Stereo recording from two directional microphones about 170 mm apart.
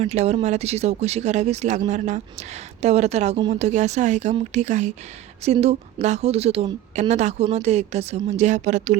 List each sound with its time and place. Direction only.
0.0 s speech: 40° right (ahead or behind)